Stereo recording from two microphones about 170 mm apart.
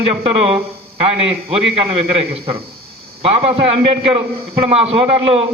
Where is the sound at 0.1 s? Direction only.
35° right (ahead or behind).